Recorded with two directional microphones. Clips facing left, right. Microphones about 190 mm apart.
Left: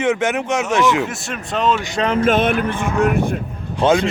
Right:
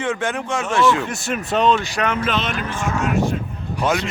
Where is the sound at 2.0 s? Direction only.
45° left (ahead or behind).